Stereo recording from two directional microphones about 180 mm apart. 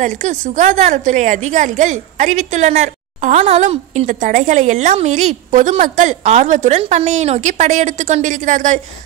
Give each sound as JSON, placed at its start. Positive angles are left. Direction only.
{"t": 0.0, "sound": "a woman's voice", "side_deg": -40}